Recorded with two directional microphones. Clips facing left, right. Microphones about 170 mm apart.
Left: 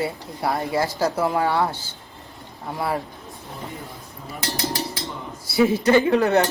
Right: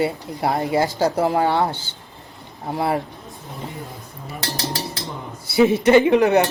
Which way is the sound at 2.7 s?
25° right (ahead or behind).